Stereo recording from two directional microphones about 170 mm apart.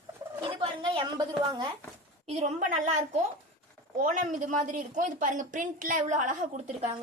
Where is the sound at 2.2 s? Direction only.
40° right (ahead or behind).